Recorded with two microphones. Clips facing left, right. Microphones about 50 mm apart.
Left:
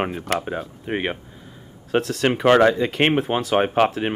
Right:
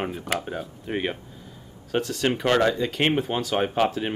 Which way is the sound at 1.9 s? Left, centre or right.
Left.